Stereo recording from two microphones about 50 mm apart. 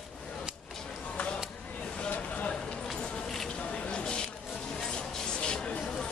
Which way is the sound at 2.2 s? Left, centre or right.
Left.